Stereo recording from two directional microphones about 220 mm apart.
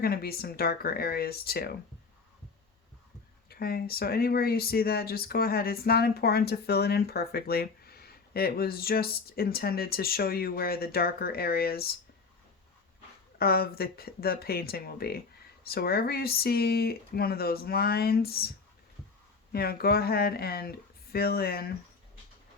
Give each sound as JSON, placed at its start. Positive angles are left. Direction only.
{"t": 0.0, "sound": "speech", "side_deg": 45}
{"t": 3.5, "sound": "speech", "side_deg": 45}
{"t": 13.4, "sound": "speech", "side_deg": 45}
{"t": 19.5, "sound": "speech", "side_deg": 45}